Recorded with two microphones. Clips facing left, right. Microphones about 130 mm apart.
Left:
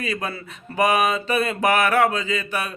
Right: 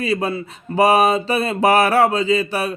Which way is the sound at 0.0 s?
30° right (ahead or behind).